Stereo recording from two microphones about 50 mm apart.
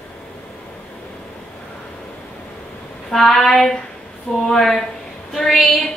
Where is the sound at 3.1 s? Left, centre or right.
Centre.